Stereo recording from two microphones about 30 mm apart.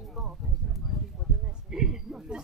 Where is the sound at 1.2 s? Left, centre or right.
Centre.